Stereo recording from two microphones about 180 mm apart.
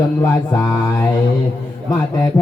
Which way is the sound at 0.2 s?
15° left (ahead or behind).